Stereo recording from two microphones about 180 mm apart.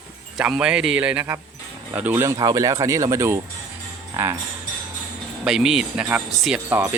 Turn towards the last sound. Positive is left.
turn(degrees=-10)  # may be behind; listen again after turning